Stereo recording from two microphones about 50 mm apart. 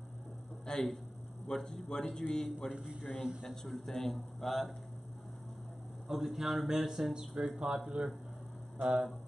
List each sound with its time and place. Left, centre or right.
0.7 s a man's voice: centre
2.7 s a man's voice: centre
3.0 s speech: centre
3.4 s a man's voice: centre
6.0 s a man's voice: centre
7.2 s a man's voice: centre